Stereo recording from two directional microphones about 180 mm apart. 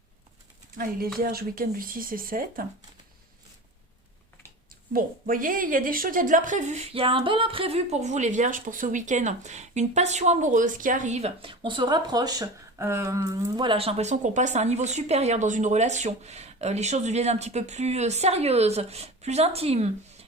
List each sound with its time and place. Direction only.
1.2 s speech: 55° right (ahead or behind)
4.9 s speech: 50° right (ahead or behind); by 13.7 s 15° right (ahead or behind)
13.7 s speech: 30° right (ahead or behind)